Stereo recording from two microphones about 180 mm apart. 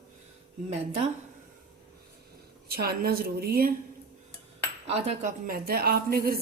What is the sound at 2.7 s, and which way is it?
A woman's voice, 60° right (ahead or behind).